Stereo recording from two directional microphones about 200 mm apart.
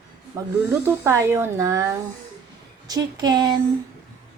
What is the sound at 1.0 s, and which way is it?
A woman's voice, 15° right (ahead or behind).